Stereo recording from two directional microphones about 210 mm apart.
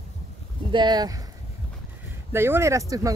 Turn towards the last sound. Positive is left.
turn(degrees=-15)  # may be behind; listen again after turning